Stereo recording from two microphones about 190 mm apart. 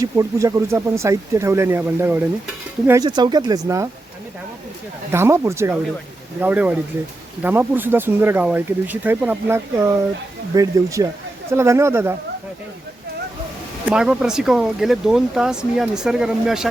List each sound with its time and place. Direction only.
0.0 s speech: 15° right (ahead or behind)
5.1 s speech: 15° right (ahead or behind)
13.8 s speech: 5° right (ahead or behind)